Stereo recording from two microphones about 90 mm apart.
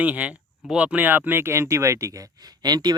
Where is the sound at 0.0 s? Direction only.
15° right (ahead or behind); by 2.2 s 35° right (ahead or behind).